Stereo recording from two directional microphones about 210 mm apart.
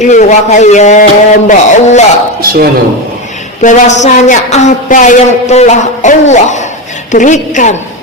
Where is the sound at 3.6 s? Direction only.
35° left (ahead or behind).